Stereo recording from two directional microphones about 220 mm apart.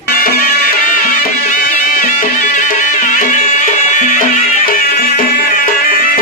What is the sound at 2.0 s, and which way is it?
Music, 35° left (ahead or behind).